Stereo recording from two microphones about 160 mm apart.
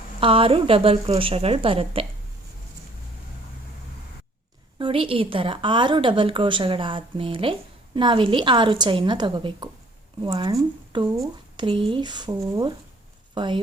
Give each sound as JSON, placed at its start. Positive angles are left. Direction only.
{"t": 0.2, "sound": "a woman's voice", "side_deg": -35}
{"t": 4.8, "sound": "a woman's voice", "side_deg": -35}